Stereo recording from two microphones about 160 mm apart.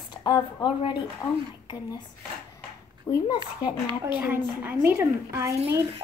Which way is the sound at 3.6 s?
10° right (ahead or behind).